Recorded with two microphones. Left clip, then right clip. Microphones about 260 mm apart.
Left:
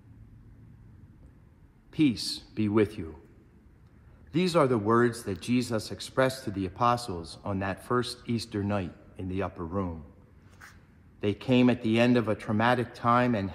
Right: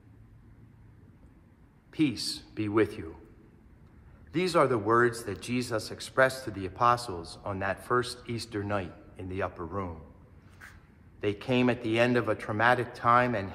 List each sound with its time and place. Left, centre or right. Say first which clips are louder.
1.9 s a man's voice: left 2 dB; left
4.3 s a man's voice: even; left
11.1 s a man's voice: left 2 dB; left